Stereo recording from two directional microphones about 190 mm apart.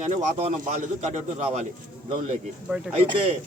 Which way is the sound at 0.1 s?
30° right (ahead or behind).